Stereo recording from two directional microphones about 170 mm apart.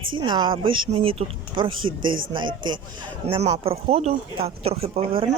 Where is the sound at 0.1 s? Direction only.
25° right (ahead or behind).